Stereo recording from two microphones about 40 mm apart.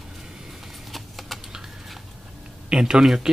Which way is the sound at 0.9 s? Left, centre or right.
Centre.